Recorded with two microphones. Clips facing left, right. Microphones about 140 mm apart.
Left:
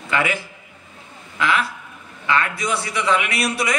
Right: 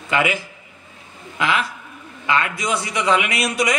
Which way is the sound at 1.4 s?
25° right (ahead or behind).